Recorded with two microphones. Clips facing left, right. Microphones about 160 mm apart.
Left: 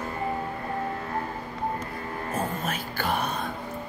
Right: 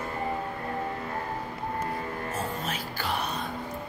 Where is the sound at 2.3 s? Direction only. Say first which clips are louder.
Left 6 dB; 50° left (ahead or behind).